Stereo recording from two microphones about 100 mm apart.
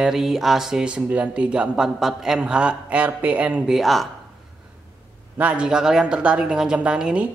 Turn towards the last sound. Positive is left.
turn(degrees=-10)  # may be behind; listen again after turning